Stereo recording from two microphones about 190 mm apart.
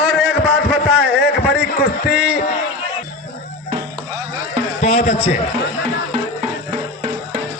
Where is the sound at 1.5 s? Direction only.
55° left (ahead or behind).